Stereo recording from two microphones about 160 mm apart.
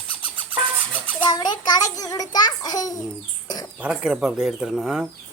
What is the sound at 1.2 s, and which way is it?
A child's voice, 25° left (ahead or behind).